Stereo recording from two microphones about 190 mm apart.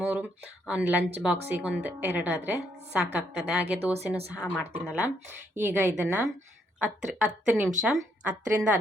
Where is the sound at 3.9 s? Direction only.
35° right (ahead or behind).